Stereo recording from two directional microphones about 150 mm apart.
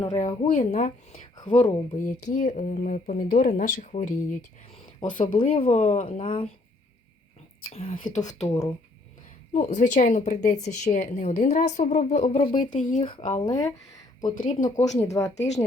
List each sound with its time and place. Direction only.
0.2 s a woman's voice: 60° left (ahead or behind)
5.2 s speech: 35° left (ahead or behind)
5.5 s a woman's voice: 45° left (ahead or behind)
7.7 s speech: 40° left (ahead or behind)
7.9 s speech: 60° left (ahead or behind)
8.4 s speech: 25° left (ahead or behind)
9.5 s a woman's voice: 55° left (ahead or behind)
12.5 s a woman's voice: 55° left (ahead or behind)
13.4 s speech: 25° left (ahead or behind)
14.3 s speech: 60° left (ahead or behind)
14.8 s a woman's voice: 50° left (ahead or behind)
15.1 s speech: 20° left (ahead or behind)